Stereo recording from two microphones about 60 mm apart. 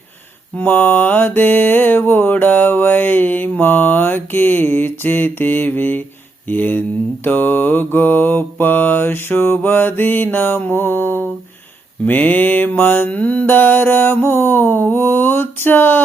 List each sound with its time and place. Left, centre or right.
0.5 s mantra: left
12.0 s a sound: left
12.7 s mantra: left
13.1 s mantra: left